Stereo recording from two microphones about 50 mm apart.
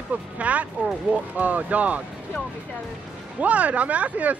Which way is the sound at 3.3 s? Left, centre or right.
Right.